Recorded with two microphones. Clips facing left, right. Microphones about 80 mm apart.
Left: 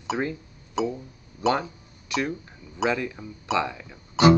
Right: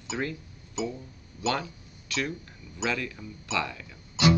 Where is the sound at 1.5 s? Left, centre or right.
Left.